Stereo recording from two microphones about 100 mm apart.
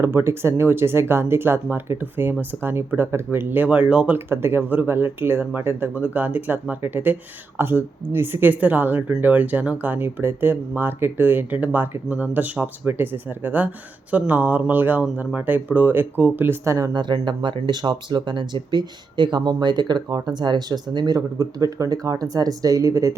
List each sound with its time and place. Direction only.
0.0 s speech: 25° right (ahead or behind)
16.9 s speech: 50° right (ahead or behind); by 23.1 s 30° right (ahead or behind)